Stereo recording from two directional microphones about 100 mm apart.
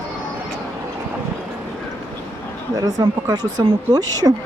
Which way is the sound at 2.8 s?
40° right (ahead or behind).